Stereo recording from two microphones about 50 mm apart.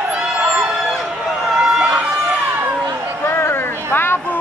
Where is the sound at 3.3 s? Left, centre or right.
Left.